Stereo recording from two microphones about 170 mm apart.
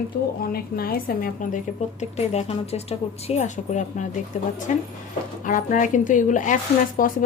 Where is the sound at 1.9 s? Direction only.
40° left (ahead or behind).